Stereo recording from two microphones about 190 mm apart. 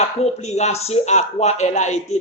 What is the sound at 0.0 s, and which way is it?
A man's voice, 35° left (ahead or behind).